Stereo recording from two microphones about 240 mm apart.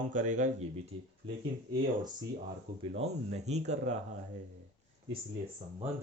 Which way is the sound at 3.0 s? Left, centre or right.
Right.